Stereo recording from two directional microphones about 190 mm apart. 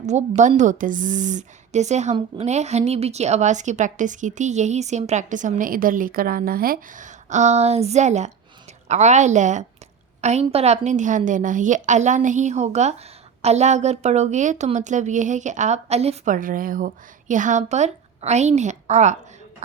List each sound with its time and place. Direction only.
0.0 s a woman's voice: 35° right (ahead or behind)